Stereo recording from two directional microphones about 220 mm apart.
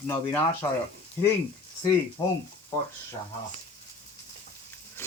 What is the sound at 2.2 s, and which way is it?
Speech, 20° left (ahead or behind).